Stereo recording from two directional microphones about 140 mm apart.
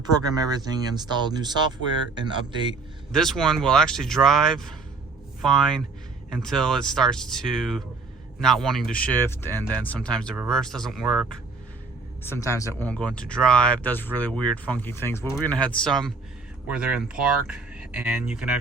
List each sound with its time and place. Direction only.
0.0 s a man's voice: 30° right (ahead or behind)
3.1 s speech: 5° left (ahead or behind)
12.2 s speech: 20° left (ahead or behind)
12.9 s speech: 10° left (ahead or behind)